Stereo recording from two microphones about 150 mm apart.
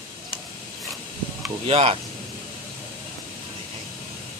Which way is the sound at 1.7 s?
40° right (ahead or behind).